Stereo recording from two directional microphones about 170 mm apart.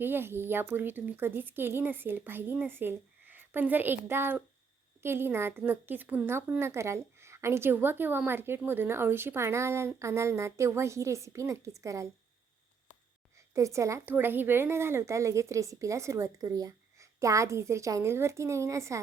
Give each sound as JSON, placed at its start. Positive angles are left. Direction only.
{"t": 0.0, "sound": "speech", "side_deg": -15}
{"t": 13.3, "sound": "speech", "side_deg": -15}